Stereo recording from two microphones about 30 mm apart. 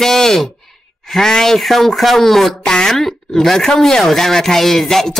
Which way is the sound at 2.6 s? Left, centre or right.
Centre.